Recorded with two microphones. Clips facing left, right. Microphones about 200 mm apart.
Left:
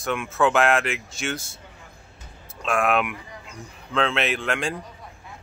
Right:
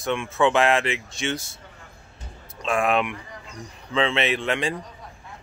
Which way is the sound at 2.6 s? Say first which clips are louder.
Even; centre (ahead or behind).